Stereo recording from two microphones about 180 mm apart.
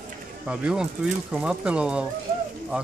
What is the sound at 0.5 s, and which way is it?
Speech, 5° right (ahead or behind).